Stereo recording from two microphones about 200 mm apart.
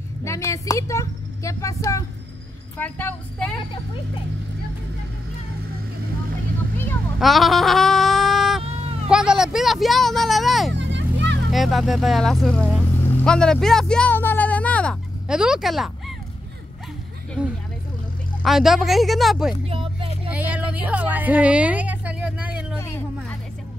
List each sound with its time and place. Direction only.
0.2 s speech: 15° left (ahead or behind)
7.2 s a sound: centre (ahead or behind)
9.1 s speech: 5° right (ahead or behind)
10.7 s vehicle: 65° right (ahead or behind)
11.5 s speech: centre (ahead or behind)
17.4 s speech: 5° right (ahead or behind)
19.6 s vehicle: 30° right (ahead or behind)
20.2 s a sound: 5° right (ahead or behind)